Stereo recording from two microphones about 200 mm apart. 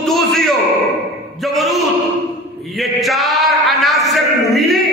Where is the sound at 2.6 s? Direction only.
Centre (ahead or behind).